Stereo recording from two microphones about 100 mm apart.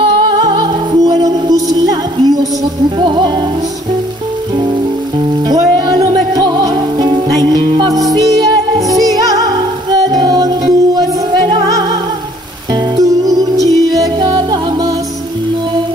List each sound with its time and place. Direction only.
0.5 s music: 45° right (ahead or behind)
3.0 s music: 55° right (ahead or behind)
5.5 s music: 45° right (ahead or behind)
8.7 s music: 35° right (ahead or behind)
12.9 s music: 35° right (ahead or behind)